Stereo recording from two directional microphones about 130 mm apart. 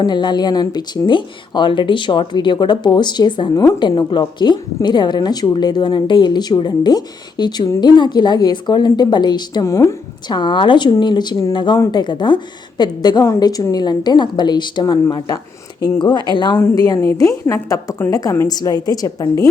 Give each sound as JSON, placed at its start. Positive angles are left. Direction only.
{"t": 0.0, "sound": "a woman's voice", "side_deg": 35}
{"t": 10.2, "sound": "a woman's voice", "side_deg": 35}
{"t": 16.3, "sound": "a woman's voice", "side_deg": 35}